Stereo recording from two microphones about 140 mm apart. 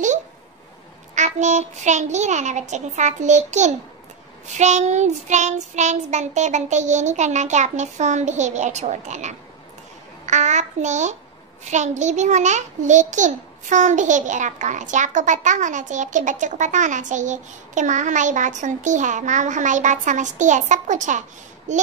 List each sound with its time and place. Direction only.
1.1 s a child's voice: 55° right (ahead or behind)